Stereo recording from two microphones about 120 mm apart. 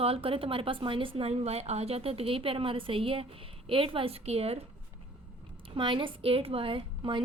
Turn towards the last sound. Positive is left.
turn(degrees=-45)  # may be behind; listen again after turning